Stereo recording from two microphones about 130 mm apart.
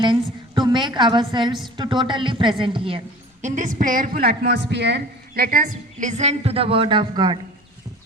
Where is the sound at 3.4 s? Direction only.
75° right (ahead or behind); by 4.2 s 90° right.